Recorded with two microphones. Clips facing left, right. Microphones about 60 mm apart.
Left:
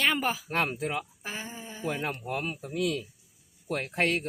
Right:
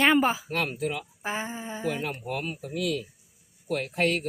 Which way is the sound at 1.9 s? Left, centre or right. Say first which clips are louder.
Even; left.